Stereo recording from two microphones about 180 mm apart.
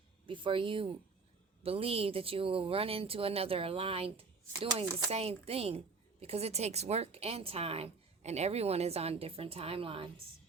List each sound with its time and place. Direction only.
0.3 s a woman's voice: 30° right (ahead or behind)